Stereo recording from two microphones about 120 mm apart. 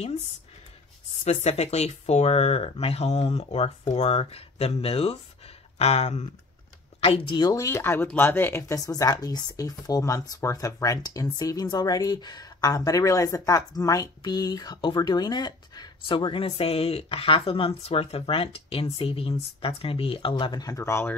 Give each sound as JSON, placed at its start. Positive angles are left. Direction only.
{"t": 1.2, "sound": "speech", "side_deg": 65}
{"t": 7.0, "sound": "a woman's voice", "side_deg": 50}
{"t": 7.6, "sound": "a woman's voice", "side_deg": 20}